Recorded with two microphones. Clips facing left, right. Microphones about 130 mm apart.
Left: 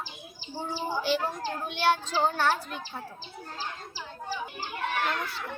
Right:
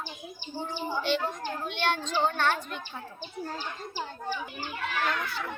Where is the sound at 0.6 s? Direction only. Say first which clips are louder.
Left 2 dB; 30° left (ahead or behind).